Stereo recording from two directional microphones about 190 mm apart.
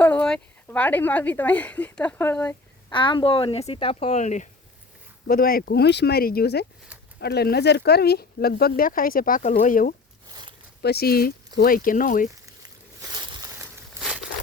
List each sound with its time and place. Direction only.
0.0 s speech: 5° left (ahead or behind)
2.9 s speech: 25° left (ahead or behind)
5.3 s speech: 50° left (ahead or behind)
10.8 s speech: 55° left (ahead or behind)
13.0 s a sound: 20° right (ahead or behind)